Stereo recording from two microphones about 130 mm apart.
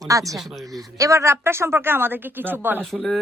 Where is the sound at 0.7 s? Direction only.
25° right (ahead or behind).